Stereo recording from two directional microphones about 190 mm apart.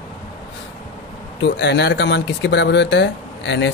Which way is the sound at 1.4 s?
60° left (ahead or behind).